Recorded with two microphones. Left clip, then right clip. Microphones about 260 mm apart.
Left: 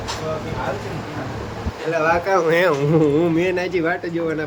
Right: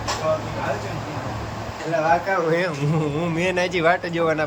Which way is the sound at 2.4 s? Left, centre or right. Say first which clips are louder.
Left 5 dB; left.